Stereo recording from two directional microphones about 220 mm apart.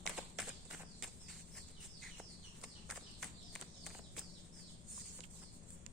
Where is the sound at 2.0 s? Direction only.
Centre (ahead or behind).